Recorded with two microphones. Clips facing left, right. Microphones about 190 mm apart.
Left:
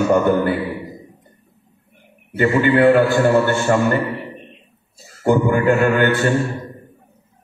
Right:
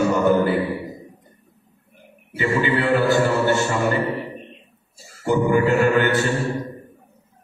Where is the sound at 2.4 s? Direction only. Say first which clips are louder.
Left 6 dB; 55° left (ahead or behind).